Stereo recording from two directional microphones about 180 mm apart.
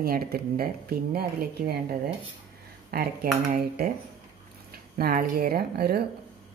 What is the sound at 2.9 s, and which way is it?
Speech, 60° right (ahead or behind).